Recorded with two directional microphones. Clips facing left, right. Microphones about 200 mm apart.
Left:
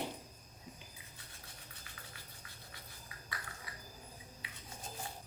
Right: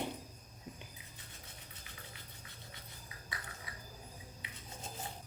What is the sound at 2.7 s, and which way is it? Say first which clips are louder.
Scratch: right 1 dB; 20° right (ahead or behind).